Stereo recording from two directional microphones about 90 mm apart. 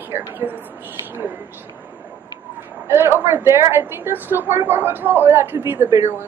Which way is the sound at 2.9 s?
25° right (ahead or behind).